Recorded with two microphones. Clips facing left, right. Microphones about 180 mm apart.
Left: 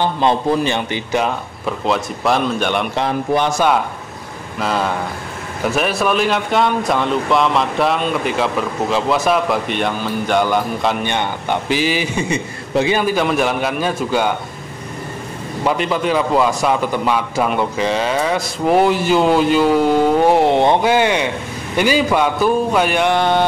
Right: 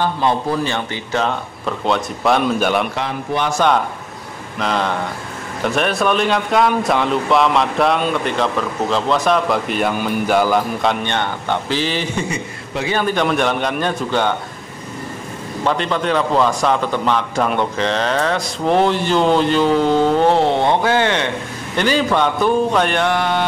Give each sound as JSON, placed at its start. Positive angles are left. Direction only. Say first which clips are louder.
{"t": 0.0, "sound": "a man's voice", "louder": "left 2 dB", "side_deg": 20}
{"t": 1.9, "sound": "speech", "louder": "right 1 dB", "side_deg": 0}
{"t": 3.4, "sound": "a man's voice", "louder": "even", "side_deg": 10}
{"t": 11.1, "sound": "a man's voice", "louder": "left 1 dB", "side_deg": 15}
{"t": 12.3, "sound": "a man's voice", "louder": "left 4 dB", "side_deg": 25}
{"t": 12.9, "sound": "speech", "louder": "left 1 dB", "side_deg": 5}
{"t": 15.6, "sound": "a man's voice", "louder": "left 1 dB", "side_deg": 10}
{"t": 23.0, "sound": "a sound", "louder": "left 3 dB", "side_deg": 30}